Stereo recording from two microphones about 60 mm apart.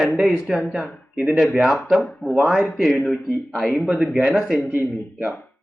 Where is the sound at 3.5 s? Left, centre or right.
Centre.